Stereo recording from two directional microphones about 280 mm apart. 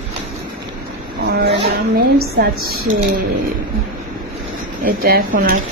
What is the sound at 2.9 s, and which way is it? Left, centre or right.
Speech, right.